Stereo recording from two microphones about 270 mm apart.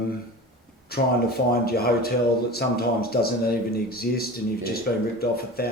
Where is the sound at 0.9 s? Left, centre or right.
Left.